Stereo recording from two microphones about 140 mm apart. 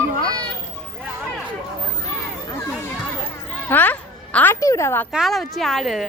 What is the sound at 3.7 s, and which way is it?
A woman's voice, 10° left (ahead or behind).